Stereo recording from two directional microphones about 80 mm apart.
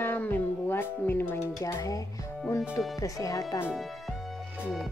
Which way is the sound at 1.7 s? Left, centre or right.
Left.